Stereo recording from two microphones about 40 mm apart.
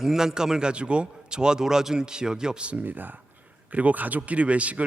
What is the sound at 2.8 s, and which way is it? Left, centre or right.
Speech, right.